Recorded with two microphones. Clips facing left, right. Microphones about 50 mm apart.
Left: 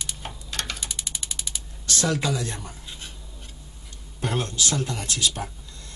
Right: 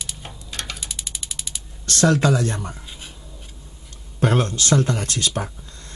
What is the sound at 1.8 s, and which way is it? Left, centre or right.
Speech, right.